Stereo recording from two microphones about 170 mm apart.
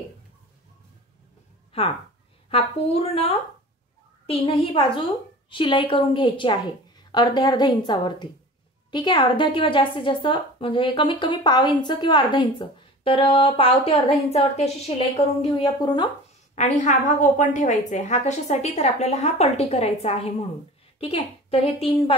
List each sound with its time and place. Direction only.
2.5 s a woman's voice: 35° left (ahead or behind)
16.5 s a woman's voice: 45° left (ahead or behind)